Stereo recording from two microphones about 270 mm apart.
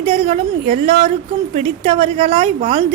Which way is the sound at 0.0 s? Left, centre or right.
Right.